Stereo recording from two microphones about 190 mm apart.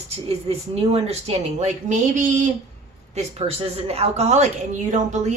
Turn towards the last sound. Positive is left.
turn(degrees=-40)  # may be behind; listen again after turning